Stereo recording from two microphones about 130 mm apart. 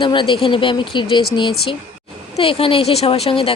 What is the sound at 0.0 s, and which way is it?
A woman's voice, 40° left (ahead or behind).